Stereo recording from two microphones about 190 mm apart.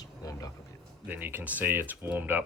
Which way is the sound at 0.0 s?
20° left (ahead or behind).